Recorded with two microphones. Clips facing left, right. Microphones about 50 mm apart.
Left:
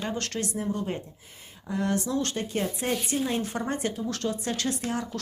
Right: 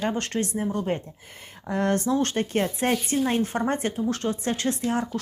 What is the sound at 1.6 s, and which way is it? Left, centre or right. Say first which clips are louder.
Speech: right 4 dB; right.